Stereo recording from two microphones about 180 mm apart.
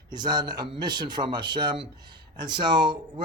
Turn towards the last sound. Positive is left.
turn(degrees=-25)  # may be behind; listen again after turning